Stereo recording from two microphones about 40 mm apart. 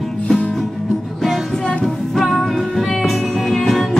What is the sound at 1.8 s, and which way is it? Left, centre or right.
Music, centre.